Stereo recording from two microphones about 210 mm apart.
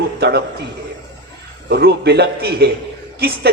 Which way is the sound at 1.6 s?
50° right (ahead or behind).